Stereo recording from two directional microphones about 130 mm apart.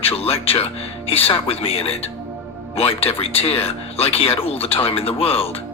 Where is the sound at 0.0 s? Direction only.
50° left (ahead or behind).